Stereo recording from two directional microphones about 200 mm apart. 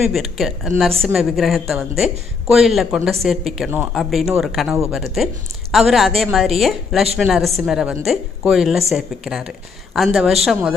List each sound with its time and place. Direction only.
0.0 s speech: centre (ahead or behind)